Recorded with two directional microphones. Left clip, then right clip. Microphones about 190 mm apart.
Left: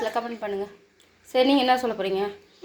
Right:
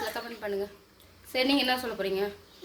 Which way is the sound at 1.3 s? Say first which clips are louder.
Left 7 dB; 20° left (ahead or behind).